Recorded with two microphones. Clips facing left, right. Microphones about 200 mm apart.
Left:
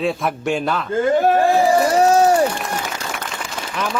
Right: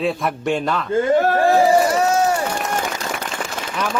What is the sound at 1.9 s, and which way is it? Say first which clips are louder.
Run: left 4 dB; 35° left (ahead or behind).